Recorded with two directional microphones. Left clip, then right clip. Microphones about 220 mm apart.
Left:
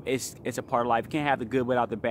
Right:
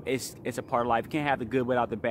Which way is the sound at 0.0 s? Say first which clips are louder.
Left 1 dB; 10° left (ahead or behind).